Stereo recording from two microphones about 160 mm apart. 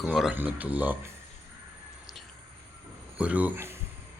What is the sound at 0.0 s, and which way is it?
Speech, 5° right (ahead or behind).